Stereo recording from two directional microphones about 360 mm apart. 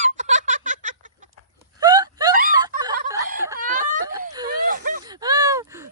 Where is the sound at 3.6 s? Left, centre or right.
Right.